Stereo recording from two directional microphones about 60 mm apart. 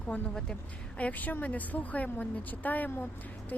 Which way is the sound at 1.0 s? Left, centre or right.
Left.